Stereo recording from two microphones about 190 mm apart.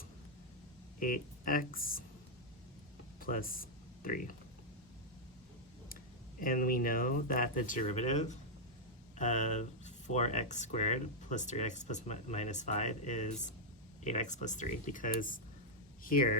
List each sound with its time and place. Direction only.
0.9 s speech: 45° left (ahead or behind)
3.2 s speech: 50° left (ahead or behind)
6.4 s speech: 45° left (ahead or behind)